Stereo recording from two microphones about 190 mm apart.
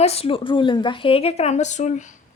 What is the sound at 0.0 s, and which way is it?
Speech, 30° left (ahead or behind).